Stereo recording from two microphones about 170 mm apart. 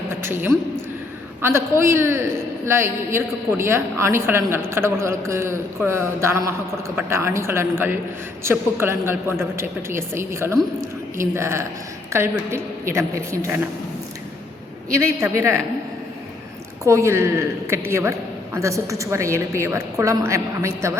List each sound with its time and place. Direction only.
0.1 s a woman's voice: 15° right (ahead or behind)
14.9 s a woman's voice: 15° right (ahead or behind)
16.8 s a woman's voice: 15° right (ahead or behind)